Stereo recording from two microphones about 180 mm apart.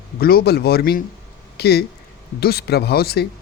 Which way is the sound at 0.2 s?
55° left (ahead or behind).